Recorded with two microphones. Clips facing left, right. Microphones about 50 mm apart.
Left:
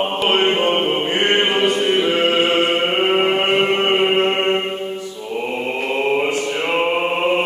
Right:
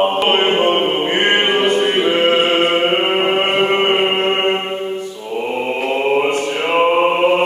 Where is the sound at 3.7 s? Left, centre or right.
Right.